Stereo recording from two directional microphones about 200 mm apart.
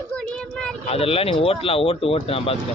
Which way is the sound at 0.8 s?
30° left (ahead or behind).